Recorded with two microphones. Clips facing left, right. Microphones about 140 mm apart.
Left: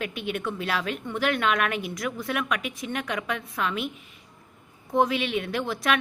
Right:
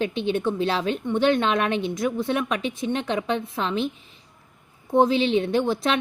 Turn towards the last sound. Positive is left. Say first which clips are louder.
# right 4 dB
turn(degrees=-25)  # may be behind; listen again after turning